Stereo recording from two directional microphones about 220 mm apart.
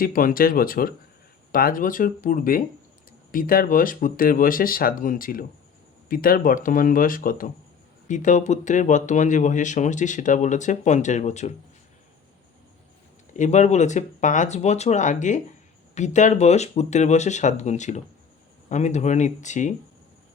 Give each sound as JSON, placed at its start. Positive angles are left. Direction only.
{"t": 0.0, "sound": "speech", "side_deg": 40}
{"t": 13.3, "sound": "speech", "side_deg": 35}